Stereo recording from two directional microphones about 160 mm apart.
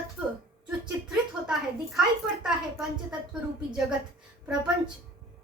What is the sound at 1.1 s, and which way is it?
A woman's voice, 5° right (ahead or behind).